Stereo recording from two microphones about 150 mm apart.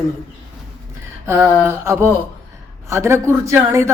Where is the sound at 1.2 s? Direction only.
20° right (ahead or behind).